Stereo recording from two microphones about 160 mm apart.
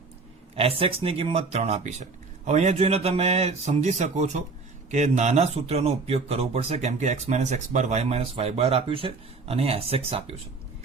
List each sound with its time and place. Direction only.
0.5 s a man's voice: 35° right (ahead or behind)